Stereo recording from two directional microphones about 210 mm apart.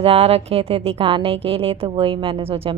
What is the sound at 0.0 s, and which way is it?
A woman's voice, 30° right (ahead or behind).